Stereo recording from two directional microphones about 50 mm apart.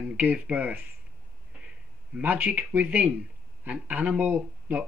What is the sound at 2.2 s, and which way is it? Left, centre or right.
Speech, right.